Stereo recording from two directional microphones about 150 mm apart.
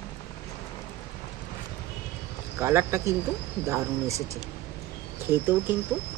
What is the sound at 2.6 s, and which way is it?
Speech, 15° right (ahead or behind).